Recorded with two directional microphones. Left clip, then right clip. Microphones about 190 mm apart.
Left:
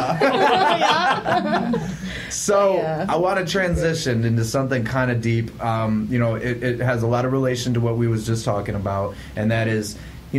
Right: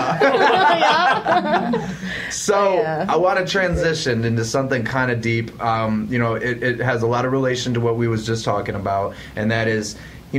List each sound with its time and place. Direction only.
0.1 s speech: centre (ahead or behind)
0.6 s speech: 30° right (ahead or behind)
1.0 s speech: centre (ahead or behind)
2.4 s speech: centre (ahead or behind)
2.8 s speech: 25° right (ahead or behind)
3.1 s speech: centre (ahead or behind)